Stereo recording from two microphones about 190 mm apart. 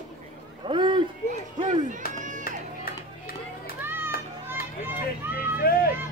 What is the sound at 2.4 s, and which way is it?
Music, 50° left (ahead or behind).